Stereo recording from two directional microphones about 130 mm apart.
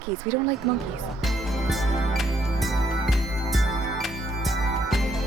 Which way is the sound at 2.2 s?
Centre (ahead or behind).